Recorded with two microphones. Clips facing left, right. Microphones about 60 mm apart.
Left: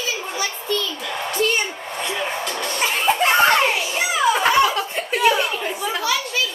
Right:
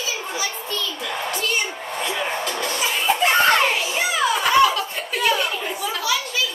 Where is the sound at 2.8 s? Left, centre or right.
Left.